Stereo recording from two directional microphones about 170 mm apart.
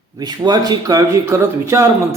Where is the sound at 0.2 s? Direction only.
25° right (ahead or behind).